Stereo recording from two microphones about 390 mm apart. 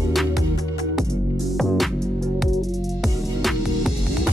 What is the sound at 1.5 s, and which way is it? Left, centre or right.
Music, centre.